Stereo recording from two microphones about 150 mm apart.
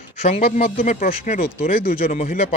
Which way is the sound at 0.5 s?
55° left (ahead or behind).